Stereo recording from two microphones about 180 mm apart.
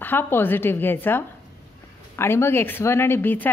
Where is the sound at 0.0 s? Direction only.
10° left (ahead or behind).